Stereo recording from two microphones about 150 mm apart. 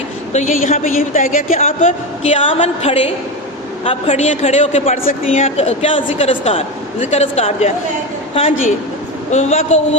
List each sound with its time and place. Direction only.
0.3 s speech: 55° left (ahead or behind)
0.9 s a woman's voice: 65° left (ahead or behind)
2.2 s a woman's voice: 40° left (ahead or behind)
9.3 s speech: 45° left (ahead or behind)